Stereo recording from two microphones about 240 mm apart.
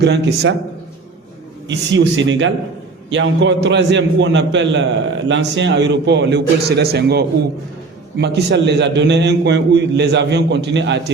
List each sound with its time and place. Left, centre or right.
0.0 s a man's voice: right
1.6 s a man's voice: right